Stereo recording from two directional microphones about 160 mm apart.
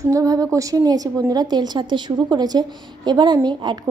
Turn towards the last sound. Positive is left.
turn(degrees=-25)  # may be behind; listen again after turning